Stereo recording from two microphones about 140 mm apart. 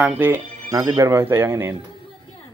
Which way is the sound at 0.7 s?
25° right (ahead or behind).